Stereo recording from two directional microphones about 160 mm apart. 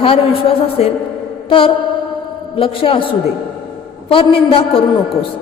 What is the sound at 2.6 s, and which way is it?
Speech, 35° left (ahead or behind).